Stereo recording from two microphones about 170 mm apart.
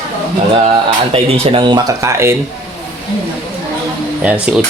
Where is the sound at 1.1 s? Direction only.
30° right (ahead or behind); by 2.3 s 15° right (ahead or behind).